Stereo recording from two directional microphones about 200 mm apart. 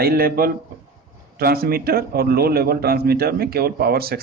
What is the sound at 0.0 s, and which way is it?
A man's voice, 50° right (ahead or behind).